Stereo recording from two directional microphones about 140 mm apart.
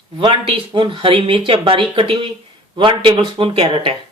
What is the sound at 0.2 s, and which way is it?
Speech, 35° right (ahead or behind).